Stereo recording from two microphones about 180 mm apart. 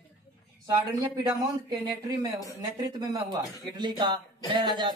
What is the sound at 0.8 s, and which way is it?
Speech, 20° right (ahead or behind).